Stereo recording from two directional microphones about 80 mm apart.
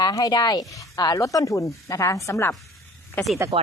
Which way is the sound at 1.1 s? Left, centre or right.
Left.